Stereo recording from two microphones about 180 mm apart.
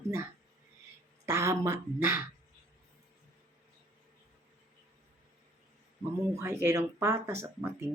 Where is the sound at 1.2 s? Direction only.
15° right (ahead or behind).